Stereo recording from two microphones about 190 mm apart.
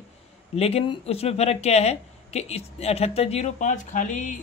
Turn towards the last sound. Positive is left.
turn(degrees=40)  # may be behind; listen again after turning